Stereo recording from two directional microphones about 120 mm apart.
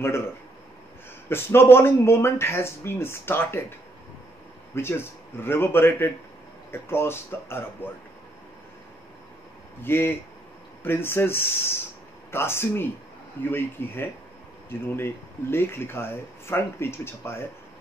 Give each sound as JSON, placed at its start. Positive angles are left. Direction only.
{"t": 1.3, "sound": "speech", "side_deg": 20}
{"t": 4.7, "sound": "speech", "side_deg": 20}
{"t": 9.8, "sound": "speech", "side_deg": 20}